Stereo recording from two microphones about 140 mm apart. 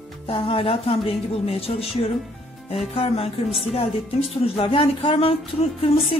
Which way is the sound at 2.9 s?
45° left (ahead or behind).